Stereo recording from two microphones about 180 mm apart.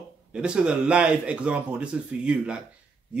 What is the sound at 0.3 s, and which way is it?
A man's voice, 5° right (ahead or behind).